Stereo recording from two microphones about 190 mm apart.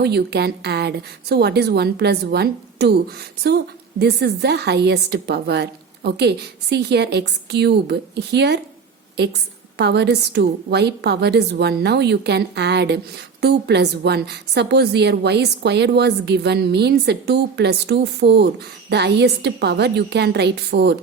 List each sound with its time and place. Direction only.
0.0 s a woman's voice: 60° right (ahead or behind)
4.0 s a woman's voice: 60° right (ahead or behind)